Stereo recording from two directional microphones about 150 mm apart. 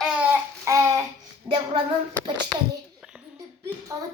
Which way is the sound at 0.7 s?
20° right (ahead or behind).